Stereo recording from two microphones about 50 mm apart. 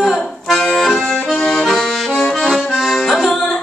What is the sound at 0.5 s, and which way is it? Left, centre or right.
Accordion, centre.